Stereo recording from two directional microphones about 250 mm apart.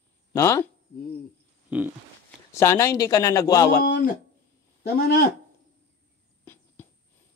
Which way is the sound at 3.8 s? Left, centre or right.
Left.